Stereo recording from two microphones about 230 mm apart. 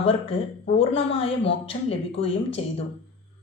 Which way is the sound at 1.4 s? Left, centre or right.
Left.